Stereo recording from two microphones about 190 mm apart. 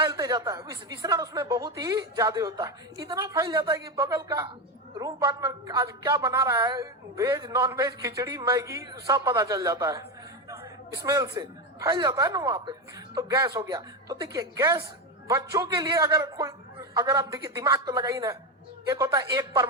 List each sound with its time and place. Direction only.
0.0 s a woman's voice: 15° right (ahead or behind)